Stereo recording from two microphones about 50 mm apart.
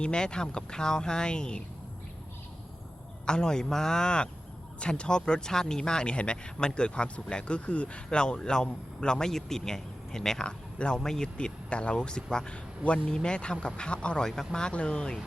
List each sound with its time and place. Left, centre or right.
0.0 s speech: centre
3.2 s speech: centre